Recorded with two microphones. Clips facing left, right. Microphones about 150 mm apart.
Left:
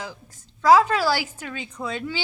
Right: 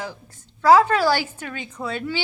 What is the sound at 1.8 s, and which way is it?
Speech, 15° left (ahead or behind).